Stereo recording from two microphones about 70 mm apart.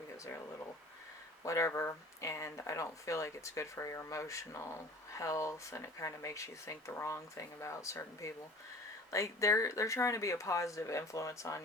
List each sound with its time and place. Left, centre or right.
1.5 s speech: left